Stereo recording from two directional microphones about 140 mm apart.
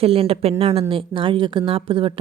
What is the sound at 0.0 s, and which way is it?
Speech, 45° right (ahead or behind).